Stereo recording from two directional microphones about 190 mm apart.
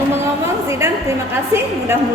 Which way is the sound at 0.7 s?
15° right (ahead or behind).